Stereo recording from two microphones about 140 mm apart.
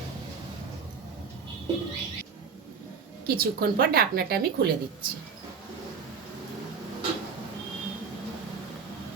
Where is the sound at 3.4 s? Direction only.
90° right.